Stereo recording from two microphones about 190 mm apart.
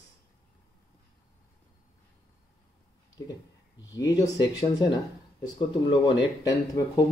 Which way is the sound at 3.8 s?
20° left (ahead or behind).